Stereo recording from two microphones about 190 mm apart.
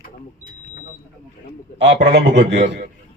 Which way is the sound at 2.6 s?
65° right (ahead or behind).